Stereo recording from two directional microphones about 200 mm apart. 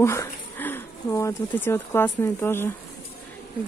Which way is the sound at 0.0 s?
15° left (ahead or behind).